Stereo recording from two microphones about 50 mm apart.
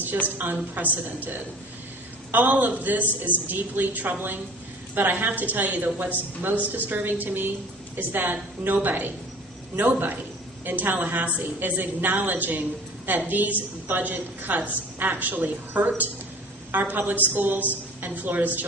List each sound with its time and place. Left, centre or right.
0.4 s a woman's voice: right
2.3 s a woman's voice: right